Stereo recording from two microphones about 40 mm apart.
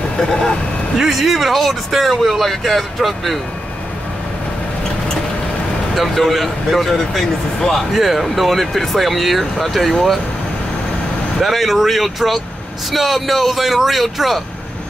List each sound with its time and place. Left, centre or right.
0.3 s speech: centre
0.9 s speech: centre
5.9 s speech: centre
11.3 s speech: centre